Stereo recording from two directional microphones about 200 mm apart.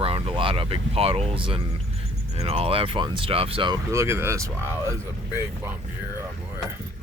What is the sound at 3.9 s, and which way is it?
Speech, 15° right (ahead or behind).